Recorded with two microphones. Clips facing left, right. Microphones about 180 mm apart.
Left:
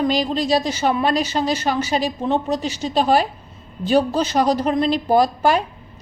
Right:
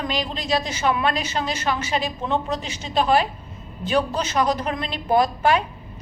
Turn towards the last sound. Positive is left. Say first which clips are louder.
# left 2 dB
turn(degrees=40)  # may be behind; listen again after turning